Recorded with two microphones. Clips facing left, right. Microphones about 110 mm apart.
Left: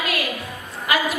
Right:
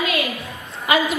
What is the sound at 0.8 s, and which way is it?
Speech, 25° right (ahead or behind).